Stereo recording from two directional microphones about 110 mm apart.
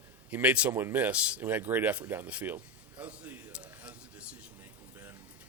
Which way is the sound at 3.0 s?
10° right (ahead or behind).